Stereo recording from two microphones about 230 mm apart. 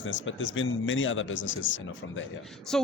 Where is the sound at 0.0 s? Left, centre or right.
Left.